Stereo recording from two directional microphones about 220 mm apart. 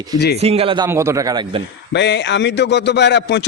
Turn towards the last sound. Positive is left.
turn(degrees=50)  # may be behind; listen again after turning